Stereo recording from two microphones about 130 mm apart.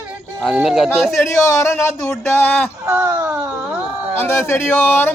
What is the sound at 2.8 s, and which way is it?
Baby cry, 15° right (ahead or behind).